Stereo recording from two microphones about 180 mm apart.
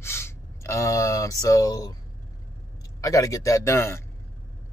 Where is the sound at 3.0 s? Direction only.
20° left (ahead or behind).